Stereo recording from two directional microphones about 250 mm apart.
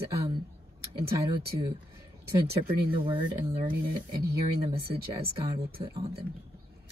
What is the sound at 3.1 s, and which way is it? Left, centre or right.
Speech, centre.